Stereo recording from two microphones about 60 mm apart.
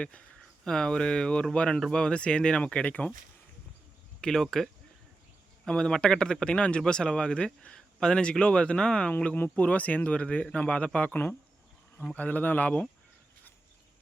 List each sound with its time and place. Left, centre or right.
0.6 s speech: centre
4.2 s speech: centre
9.6 s speech: left